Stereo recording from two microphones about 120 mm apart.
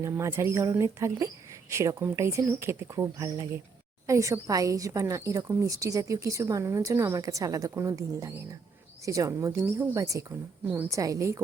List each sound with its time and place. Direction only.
0.0 s speech: 25° right (ahead or behind)